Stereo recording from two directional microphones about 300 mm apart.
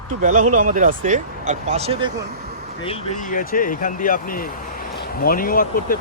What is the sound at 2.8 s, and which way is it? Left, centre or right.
Speech, left.